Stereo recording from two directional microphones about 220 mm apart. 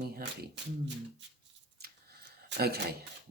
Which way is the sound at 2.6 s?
45° right (ahead or behind).